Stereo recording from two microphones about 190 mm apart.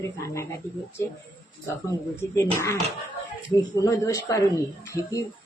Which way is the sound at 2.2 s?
15° left (ahead or behind).